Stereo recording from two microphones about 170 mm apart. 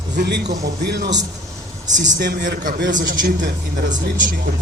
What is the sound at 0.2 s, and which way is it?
Speech, 75° right (ahead or behind).